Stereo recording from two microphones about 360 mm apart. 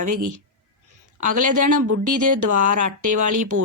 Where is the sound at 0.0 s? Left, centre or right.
Right.